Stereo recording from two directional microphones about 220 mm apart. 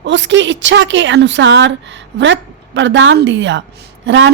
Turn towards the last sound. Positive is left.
turn(degrees=-55)  # may be behind; listen again after turning